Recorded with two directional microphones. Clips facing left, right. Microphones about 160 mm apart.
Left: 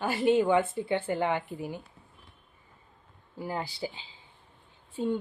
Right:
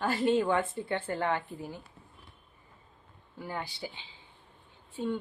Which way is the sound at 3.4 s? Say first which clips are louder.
Left 4 dB; 35° left (ahead or behind).